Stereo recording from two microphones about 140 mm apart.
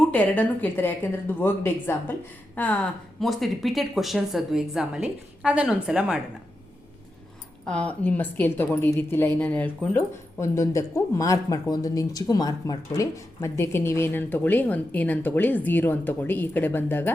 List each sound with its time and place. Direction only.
0.1 s a woman's voice: 10° left (ahead or behind); by 6.1 s 5° right (ahead or behind)
7.7 s a woman's voice: 10° left (ahead or behind)
10.4 s a woman's voice: 20° left (ahead or behind)